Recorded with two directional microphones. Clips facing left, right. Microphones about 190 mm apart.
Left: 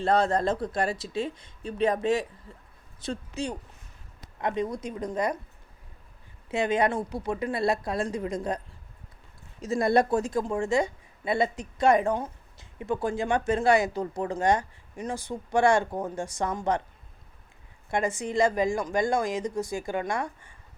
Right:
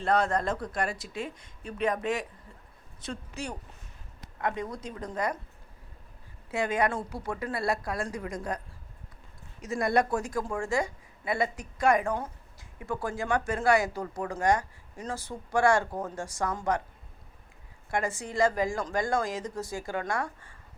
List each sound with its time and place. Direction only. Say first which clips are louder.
0.0 s speech: left 3 dB; 30° left (ahead or behind)
6.5 s speech: left 3 dB; 20° left (ahead or behind)
17.9 s a woman's voice: left 3 dB; 20° left (ahead or behind)